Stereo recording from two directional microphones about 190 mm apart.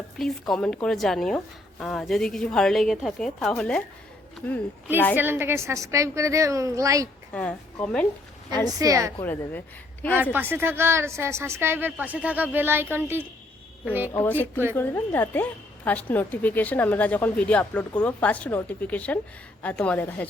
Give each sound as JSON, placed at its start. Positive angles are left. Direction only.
{"t": 0.2, "sound": "a woman's voice", "side_deg": 0}
{"t": 5.1, "sound": "a woman's voice", "side_deg": -10}
{"t": 7.3, "sound": "a woman's voice", "side_deg": 5}
{"t": 8.8, "sound": "a woman's voice", "side_deg": -15}
{"t": 9.2, "sound": "a woman's voice", "side_deg": 10}
{"t": 10.3, "sound": "a woman's voice", "side_deg": -10}
{"t": 14.1, "sound": "a woman's voice", "side_deg": 10}